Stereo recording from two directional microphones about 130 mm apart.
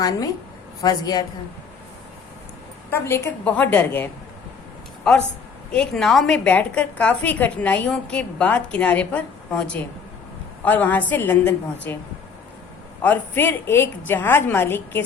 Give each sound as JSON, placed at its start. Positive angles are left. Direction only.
{"t": 0.0, "sound": "a woman's voice", "side_deg": 30}
{"t": 2.9, "sound": "a woman's voice", "side_deg": 20}
{"t": 5.7, "sound": "a woman's voice", "side_deg": 5}
{"t": 13.0, "sound": "a woman's voice", "side_deg": 15}